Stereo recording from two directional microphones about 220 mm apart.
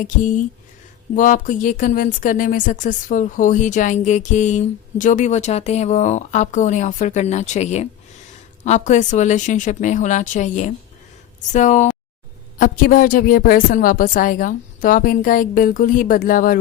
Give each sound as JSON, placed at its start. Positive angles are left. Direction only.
{"t": 0.0, "sound": "speech", "side_deg": 35}